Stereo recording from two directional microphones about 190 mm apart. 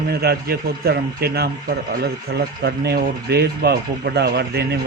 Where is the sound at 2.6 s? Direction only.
55° right (ahead or behind).